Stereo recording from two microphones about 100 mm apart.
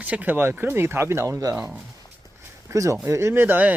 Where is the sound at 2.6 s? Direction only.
30° right (ahead or behind).